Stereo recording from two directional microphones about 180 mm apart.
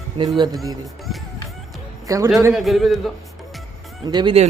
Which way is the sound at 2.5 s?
Centre (ahead or behind).